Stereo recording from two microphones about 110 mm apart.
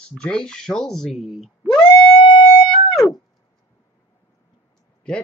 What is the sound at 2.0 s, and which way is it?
Music, 55° left (ahead or behind).